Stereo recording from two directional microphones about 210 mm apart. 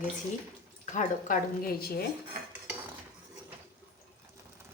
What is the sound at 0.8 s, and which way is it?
Speech, 35° left (ahead or behind).